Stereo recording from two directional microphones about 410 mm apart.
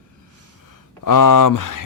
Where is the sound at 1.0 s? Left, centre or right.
Left.